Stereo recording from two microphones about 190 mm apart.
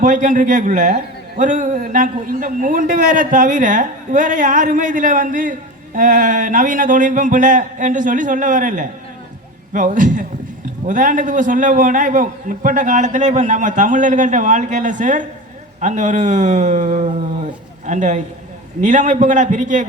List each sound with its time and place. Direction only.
0.0 s a man's voice: 40° right (ahead or behind)